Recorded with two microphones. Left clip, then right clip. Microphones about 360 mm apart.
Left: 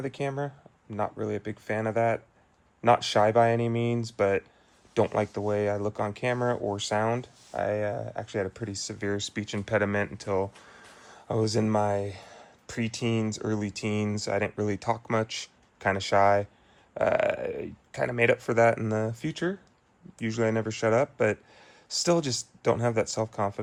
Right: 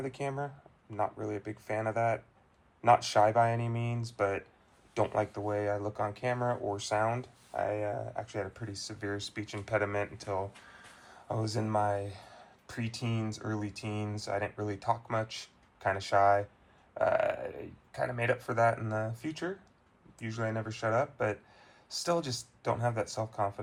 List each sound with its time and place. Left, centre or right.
0.0 s speech: left
8.5 s speech: centre
9.1 s speech: left
11.4 s speech: centre
18.2 s speech: centre
19.2 s speech: left
22.6 s speech: left